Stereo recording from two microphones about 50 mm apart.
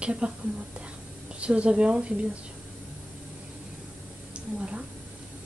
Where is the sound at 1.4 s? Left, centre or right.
Right.